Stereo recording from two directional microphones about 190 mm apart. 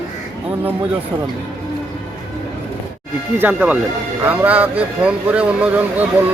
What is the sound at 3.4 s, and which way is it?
Speech, 10° right (ahead or behind).